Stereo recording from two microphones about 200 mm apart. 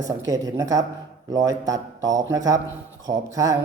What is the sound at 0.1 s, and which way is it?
A man's voice, 15° right (ahead or behind).